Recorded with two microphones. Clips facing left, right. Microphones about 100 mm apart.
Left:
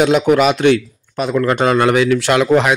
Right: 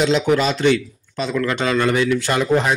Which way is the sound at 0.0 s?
60° left (ahead or behind).